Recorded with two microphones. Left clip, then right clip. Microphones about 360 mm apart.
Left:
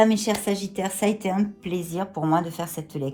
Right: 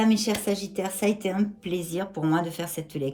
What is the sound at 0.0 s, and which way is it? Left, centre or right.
Speech, centre.